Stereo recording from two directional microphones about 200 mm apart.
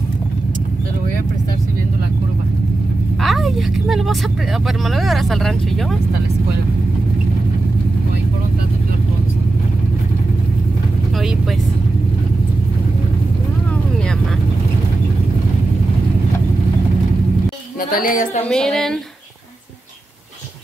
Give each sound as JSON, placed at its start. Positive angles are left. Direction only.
{"t": 3.2, "sound": "vehicle", "side_deg": 0}
{"t": 4.6, "sound": "speech", "side_deg": 0}
{"t": 17.9, "sound": "a woman's voice", "side_deg": 45}
{"t": 18.5, "sound": "speech", "side_deg": 5}